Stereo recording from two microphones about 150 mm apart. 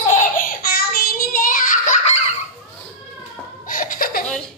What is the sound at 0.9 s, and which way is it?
Child singing, 85° left.